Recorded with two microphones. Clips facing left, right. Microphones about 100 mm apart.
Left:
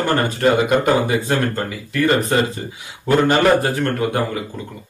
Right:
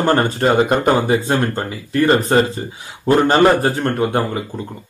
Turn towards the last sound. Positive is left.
turn(degrees=-30)  # may be behind; listen again after turning